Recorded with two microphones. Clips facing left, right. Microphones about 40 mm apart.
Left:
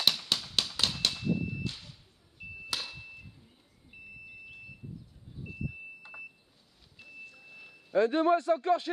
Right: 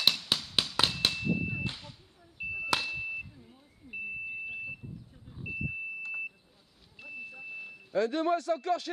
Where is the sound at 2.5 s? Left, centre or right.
Right.